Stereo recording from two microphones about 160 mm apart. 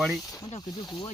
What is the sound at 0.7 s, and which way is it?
Speech, 25° left (ahead or behind).